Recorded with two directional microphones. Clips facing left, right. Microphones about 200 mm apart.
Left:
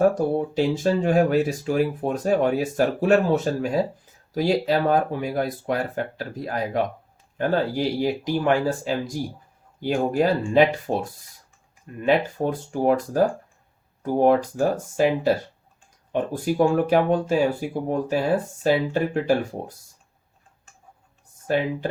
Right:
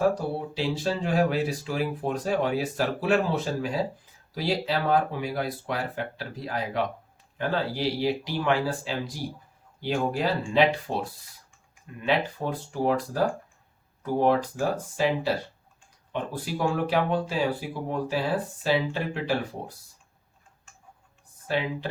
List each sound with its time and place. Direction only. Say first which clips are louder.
0.1 s speech: left 7 dB; 45° left (ahead or behind)
12.0 s speech: left 5 dB; 45° left (ahead or behind)
21.4 s speech: left 5 dB; 50° left (ahead or behind)